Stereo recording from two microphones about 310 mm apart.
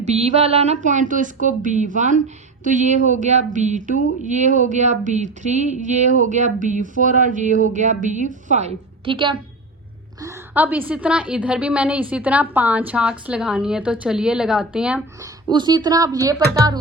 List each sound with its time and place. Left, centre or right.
0.0 s a woman's voice: right